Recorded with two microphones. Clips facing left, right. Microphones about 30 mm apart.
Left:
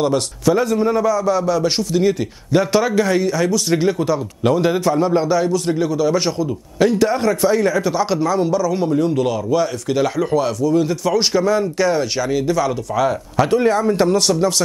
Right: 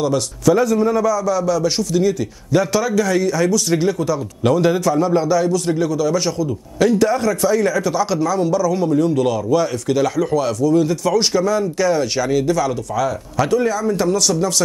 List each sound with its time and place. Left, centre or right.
0.0 s a man's voice: centre
3.3 s a man's voice: centre
4.6 s a man's voice: left
11.4 s a man's voice: left
12.0 s speech: centre
13.5 s speech: left